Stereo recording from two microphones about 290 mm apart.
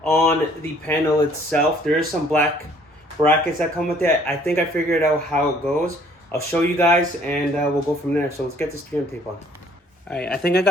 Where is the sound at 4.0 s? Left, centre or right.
Centre.